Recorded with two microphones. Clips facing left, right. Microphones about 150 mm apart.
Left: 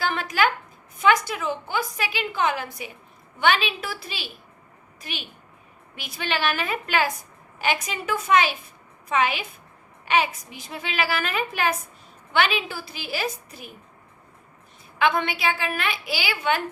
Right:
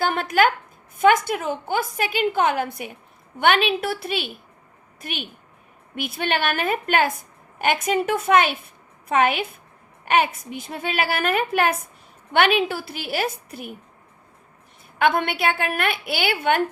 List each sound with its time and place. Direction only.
0.0 s a sound: 50° right (ahead or behind)
0.9 s a woman's voice: 50° right (ahead or behind)
14.9 s a woman's voice: 50° right (ahead or behind)